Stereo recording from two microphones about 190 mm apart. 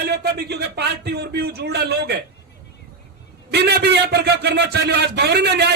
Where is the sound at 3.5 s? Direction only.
60° right (ahead or behind).